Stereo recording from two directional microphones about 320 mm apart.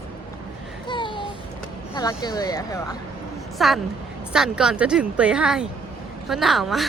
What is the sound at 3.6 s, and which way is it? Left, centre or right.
A woman's voice, centre.